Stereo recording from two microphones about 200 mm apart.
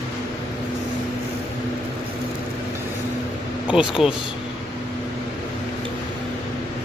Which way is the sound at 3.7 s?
5° right (ahead or behind).